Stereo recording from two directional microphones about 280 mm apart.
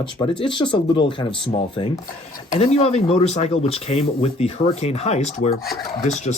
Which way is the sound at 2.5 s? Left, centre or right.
Left.